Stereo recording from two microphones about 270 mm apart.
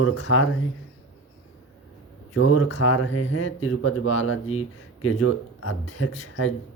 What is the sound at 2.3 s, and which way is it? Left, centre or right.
Speech, left.